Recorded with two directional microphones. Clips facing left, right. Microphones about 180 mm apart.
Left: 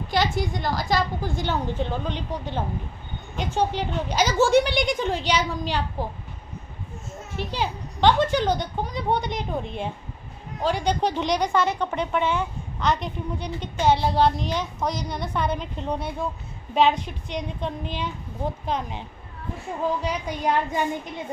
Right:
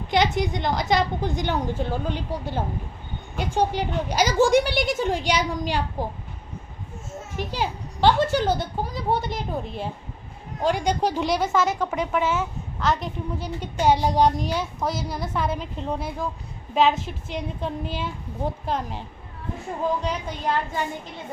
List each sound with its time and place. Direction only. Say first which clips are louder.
0.1 s a woman's voice: right 2 dB; 20° right (ahead or behind)
7.3 s a woman's voice: even; 10° right (ahead or behind)
20.0 s a woman's voice: left 1 dB; 10° left (ahead or behind)